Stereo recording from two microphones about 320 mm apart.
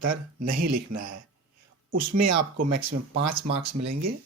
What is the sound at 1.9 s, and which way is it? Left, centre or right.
Speech, right.